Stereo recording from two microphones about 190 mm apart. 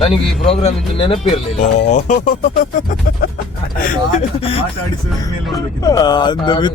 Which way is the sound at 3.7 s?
35° left (ahead or behind).